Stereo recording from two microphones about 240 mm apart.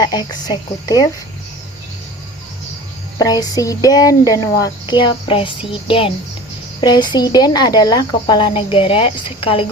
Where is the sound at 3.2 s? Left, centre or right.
Centre.